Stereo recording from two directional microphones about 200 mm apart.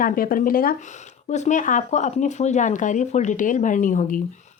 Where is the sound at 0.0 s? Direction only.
45° left (ahead or behind).